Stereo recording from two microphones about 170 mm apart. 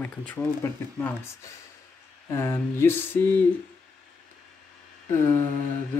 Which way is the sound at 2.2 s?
15° left (ahead or behind).